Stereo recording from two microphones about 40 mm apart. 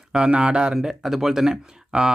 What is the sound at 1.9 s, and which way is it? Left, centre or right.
Speech, right.